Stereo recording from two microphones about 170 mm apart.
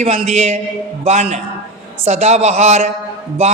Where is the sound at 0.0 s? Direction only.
40° right (ahead or behind).